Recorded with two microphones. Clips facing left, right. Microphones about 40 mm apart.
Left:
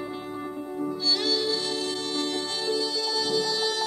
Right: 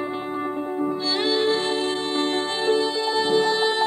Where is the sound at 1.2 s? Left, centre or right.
Right.